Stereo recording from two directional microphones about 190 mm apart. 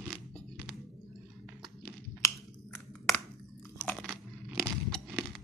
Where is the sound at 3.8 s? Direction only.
Centre (ahead or behind).